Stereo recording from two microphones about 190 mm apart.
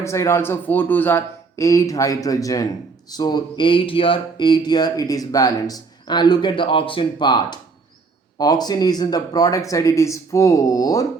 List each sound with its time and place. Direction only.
0.0 s speech: 15° left (ahead or behind)